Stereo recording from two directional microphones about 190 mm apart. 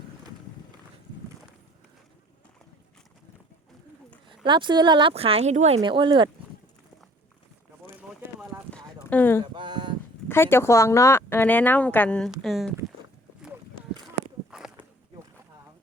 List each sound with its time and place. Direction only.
4.4 s speech: 25° right (ahead or behind)
8.7 s clip-clop: 10° left (ahead or behind)
9.4 s a sound: 25° right (ahead or behind)
10.2 s speech: 10° left (ahead or behind)
14.5 s walk: 5° right (ahead or behind)